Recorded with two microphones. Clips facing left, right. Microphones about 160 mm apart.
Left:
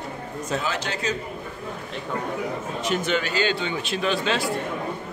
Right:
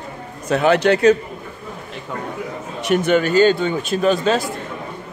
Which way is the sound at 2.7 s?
60° right (ahead or behind).